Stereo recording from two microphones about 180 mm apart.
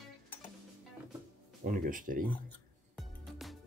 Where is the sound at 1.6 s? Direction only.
50° right (ahead or behind).